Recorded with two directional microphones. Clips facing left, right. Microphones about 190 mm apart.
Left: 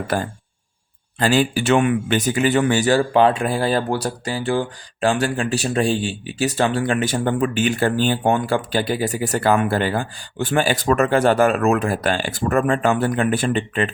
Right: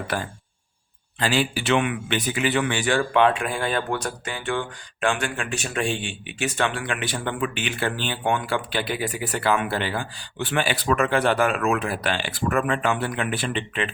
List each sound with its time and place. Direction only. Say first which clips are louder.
0.1 s speech: left 7 dB; 45° left (ahead or behind)